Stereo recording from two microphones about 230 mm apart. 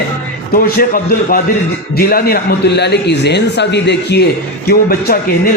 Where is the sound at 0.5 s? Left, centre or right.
Left.